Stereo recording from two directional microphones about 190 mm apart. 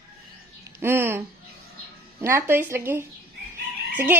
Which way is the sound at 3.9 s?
10° right (ahead or behind).